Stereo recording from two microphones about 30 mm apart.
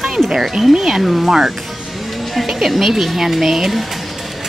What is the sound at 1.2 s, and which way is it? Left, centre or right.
Speech, centre.